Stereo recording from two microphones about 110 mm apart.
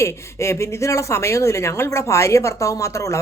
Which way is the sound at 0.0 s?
25° left (ahead or behind).